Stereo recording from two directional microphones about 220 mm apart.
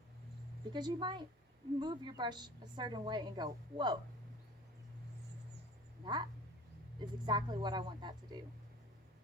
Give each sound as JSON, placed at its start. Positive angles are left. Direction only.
{"t": 0.7, "sound": "a woman's voice", "side_deg": -20}
{"t": 6.0, "sound": "a woman's voice", "side_deg": -20}